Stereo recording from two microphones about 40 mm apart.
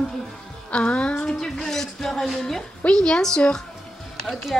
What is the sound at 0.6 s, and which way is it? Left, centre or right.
Speech, left.